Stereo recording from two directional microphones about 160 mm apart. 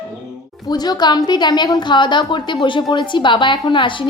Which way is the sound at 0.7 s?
25° left (ahead or behind).